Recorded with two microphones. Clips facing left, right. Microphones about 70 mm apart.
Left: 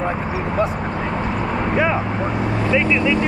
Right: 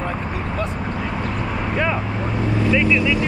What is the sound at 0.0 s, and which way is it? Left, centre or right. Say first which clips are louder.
Dog: left 3 dB; centre.